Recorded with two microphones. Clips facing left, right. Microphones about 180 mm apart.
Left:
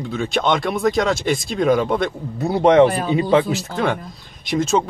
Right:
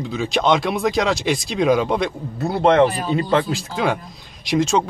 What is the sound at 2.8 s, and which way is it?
Speech, 55° left (ahead or behind).